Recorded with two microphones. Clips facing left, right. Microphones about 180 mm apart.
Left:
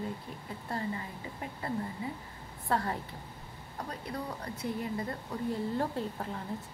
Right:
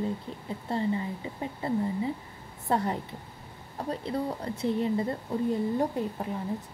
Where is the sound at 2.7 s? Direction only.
20° right (ahead or behind).